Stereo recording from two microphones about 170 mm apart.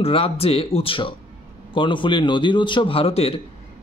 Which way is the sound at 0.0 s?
35° left (ahead or behind).